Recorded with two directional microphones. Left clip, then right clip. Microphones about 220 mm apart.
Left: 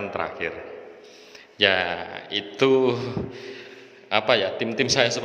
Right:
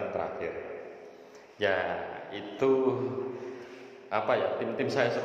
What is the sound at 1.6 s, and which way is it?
A man's voice, 45° left (ahead or behind).